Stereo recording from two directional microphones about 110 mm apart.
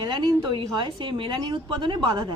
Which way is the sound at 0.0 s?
45° right (ahead or behind).